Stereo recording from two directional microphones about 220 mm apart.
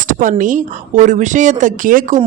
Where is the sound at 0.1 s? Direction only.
35° right (ahead or behind).